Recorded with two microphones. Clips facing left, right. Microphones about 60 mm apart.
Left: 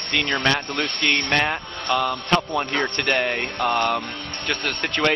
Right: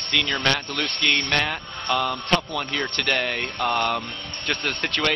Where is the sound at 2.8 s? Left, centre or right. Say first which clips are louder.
Left 3 dB; centre.